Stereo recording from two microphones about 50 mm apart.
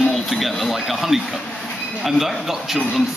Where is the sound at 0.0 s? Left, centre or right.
Centre.